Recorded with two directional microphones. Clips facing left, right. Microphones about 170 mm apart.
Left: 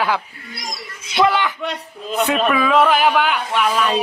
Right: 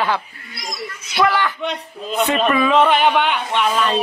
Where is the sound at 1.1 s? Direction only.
20° left (ahead or behind).